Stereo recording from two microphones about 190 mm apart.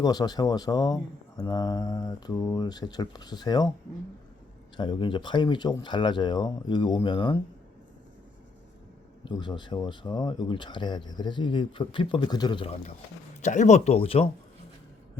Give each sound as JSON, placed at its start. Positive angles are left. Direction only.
{"t": 0.0, "sound": "speech", "side_deg": 20}
{"t": 4.8, "sound": "speech", "side_deg": 25}
{"t": 9.2, "sound": "speech", "side_deg": 25}
{"t": 13.4, "sound": "speech", "side_deg": 40}